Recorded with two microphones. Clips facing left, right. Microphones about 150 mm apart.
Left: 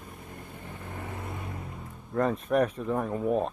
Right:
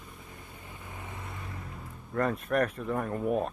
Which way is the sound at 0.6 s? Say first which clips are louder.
Left 5 dB; 50° left (ahead or behind).